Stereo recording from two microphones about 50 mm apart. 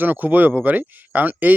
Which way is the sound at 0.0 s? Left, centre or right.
Right.